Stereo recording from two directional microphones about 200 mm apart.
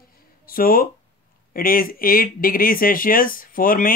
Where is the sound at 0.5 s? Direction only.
45° left (ahead or behind).